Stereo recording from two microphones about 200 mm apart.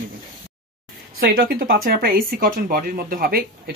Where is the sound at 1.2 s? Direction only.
50° right (ahead or behind).